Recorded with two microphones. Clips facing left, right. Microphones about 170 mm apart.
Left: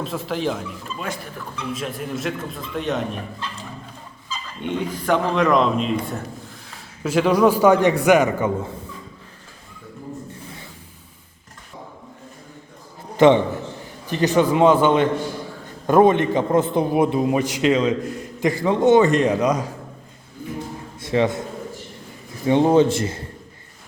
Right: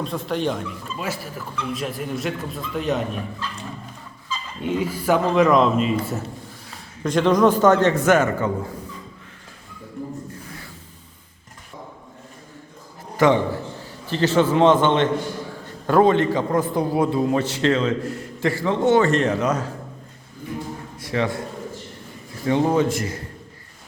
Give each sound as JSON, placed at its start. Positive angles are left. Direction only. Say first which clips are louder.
{"t": 0.0, "sound": "speech", "louder": "even", "side_deg": 0}
{"t": 4.6, "sound": "a man's voice", "louder": "right 2 dB", "side_deg": -5}
{"t": 13.1, "sound": "a man's voice", "louder": "left 4 dB", "side_deg": 20}
{"t": 21.0, "sound": "a man's voice", "louder": "left 4 dB", "side_deg": 20}
{"t": 22.4, "sound": "a man's voice", "louder": "left 4 dB", "side_deg": 20}